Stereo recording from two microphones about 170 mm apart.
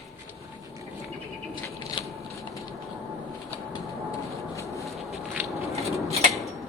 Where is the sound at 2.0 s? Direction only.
30° left (ahead or behind).